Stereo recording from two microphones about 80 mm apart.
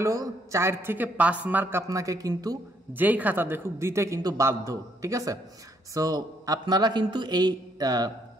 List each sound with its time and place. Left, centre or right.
0.0 s speech: right
1.8 s a man's voice: right
2.9 s speech: right
4.2 s a man's voice: right
6.6 s speech: right